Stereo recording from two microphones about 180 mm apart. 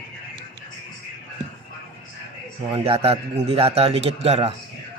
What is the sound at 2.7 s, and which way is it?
A man's voice, 35° right (ahead or behind).